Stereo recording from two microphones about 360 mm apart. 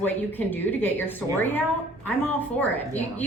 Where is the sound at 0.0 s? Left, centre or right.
Centre.